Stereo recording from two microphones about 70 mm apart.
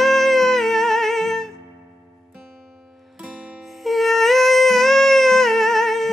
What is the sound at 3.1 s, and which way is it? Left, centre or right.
Music, centre.